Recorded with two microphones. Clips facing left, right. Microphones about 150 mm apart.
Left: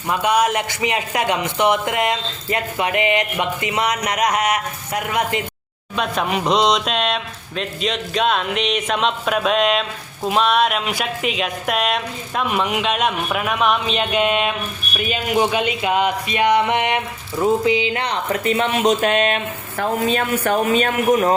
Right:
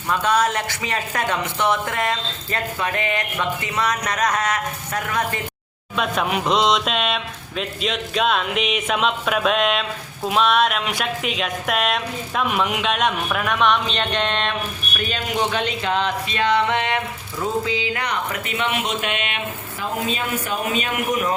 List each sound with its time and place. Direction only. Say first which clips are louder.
0.1 s speech: left 2 dB; 15° left (ahead or behind)
6.0 s speech: left 1 dB; centre (ahead or behind); by 19.4 s 40° left (ahead or behind)
19.8 s speech: left 6 dB; 55° left (ahead or behind)